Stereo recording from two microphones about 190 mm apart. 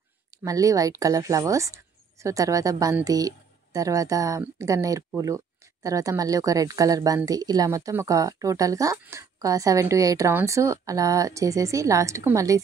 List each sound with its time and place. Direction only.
0.4 s a woman's voice: 15° right (ahead or behind)